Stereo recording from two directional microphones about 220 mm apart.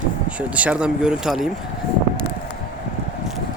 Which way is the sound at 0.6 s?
5° right (ahead or behind).